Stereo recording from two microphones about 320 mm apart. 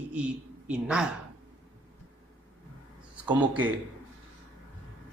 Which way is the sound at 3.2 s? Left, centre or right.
Centre.